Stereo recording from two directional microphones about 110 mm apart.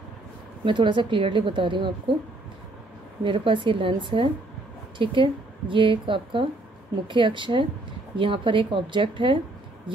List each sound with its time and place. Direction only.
0.7 s speech: 45° right (ahead or behind)
3.3 s speech: 50° right (ahead or behind)